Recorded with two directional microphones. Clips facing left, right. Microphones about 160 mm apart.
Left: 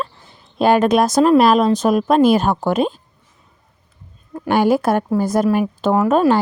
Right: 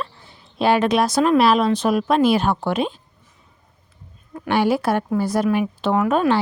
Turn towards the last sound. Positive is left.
turn(degrees=40)  # may be behind; listen again after turning